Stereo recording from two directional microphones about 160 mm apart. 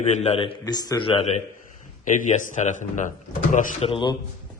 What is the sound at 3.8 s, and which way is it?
Speech, 30° left (ahead or behind).